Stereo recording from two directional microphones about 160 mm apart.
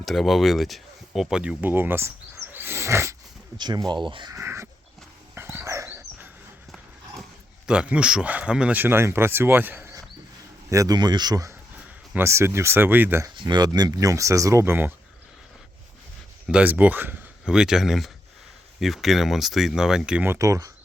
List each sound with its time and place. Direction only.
0.0 s speech: centre (ahead or behind); by 4.7 s 15° right (ahead or behind)
5.3 s dog: 15° right (ahead or behind)
7.7 s speech: 5° right (ahead or behind)
13.3 s speech: 30° right (ahead or behind); by 14.9 s 15° right (ahead or behind)
16.5 s speech: 10° right (ahead or behind)